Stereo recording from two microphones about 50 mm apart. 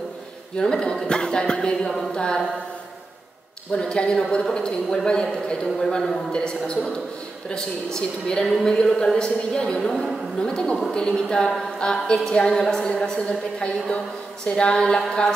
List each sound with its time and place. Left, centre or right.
0.6 s a woman's voice: centre
3.7 s a woman's voice: centre